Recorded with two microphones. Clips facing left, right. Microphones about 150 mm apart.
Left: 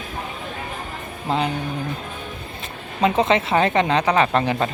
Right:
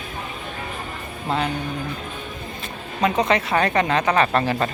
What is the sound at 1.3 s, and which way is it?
Speech, 20° left (ahead or behind).